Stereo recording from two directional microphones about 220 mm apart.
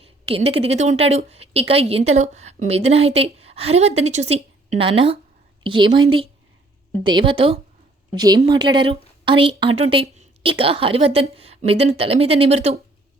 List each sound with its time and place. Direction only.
0.3 s a woman's voice: 25° right (ahead or behind)